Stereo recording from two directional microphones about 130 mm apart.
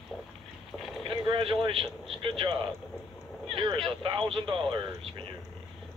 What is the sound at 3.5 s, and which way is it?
Speech, 35° right (ahead or behind).